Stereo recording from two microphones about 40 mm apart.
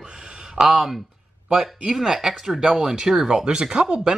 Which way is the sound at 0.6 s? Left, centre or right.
Centre.